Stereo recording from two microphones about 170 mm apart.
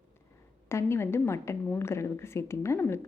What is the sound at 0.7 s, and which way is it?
A woman's voice, 15° left (ahead or behind).